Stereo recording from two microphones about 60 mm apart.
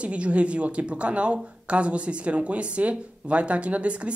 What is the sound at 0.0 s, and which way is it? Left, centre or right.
Speech, right.